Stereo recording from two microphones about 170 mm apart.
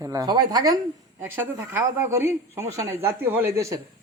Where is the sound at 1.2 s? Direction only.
10° right (ahead or behind).